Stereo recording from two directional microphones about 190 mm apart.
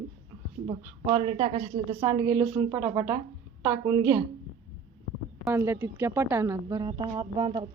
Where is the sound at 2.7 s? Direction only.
20° right (ahead or behind).